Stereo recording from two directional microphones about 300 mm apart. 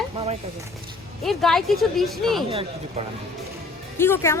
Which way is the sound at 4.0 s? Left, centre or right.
Centre.